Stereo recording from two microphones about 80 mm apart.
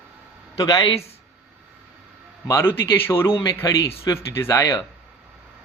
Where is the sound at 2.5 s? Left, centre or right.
Left.